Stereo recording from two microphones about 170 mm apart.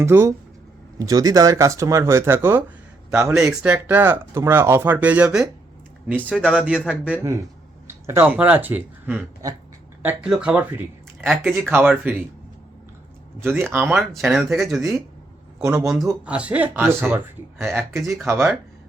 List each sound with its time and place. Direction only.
0.0 s a man's voice: 15° right (ahead or behind)
11.3 s speech: centre (ahead or behind)
13.4 s speech: 15° right (ahead or behind)
14.5 s speech: centre (ahead or behind)
16.2 s speech: 5° right (ahead or behind)